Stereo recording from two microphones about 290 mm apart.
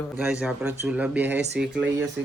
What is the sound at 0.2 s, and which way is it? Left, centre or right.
A man's voice, centre.